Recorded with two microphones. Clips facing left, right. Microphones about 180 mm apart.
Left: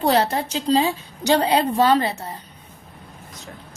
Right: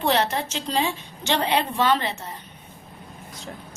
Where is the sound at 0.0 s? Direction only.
35° left (ahead or behind).